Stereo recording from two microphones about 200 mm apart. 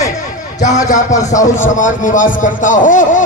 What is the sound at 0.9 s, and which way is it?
Speech, 40° left (ahead or behind).